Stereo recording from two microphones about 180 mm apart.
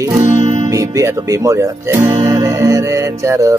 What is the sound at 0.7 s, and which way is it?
Speech, 15° right (ahead or behind).